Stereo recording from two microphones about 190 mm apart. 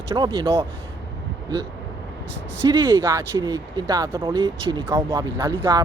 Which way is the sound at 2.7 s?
25° right (ahead or behind).